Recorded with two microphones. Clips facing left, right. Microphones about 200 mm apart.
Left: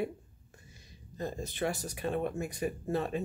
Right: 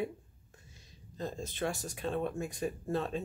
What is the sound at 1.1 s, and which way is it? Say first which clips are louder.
Speech: left 2 dB; 10° left (ahead or behind).